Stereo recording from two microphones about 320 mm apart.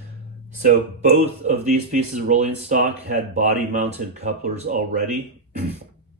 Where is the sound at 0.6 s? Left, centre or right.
Right.